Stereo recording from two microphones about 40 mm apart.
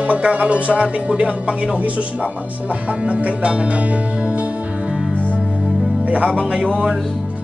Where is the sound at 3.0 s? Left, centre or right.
Right.